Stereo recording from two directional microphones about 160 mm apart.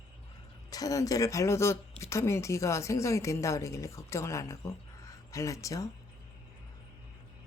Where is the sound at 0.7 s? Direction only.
20° left (ahead or behind).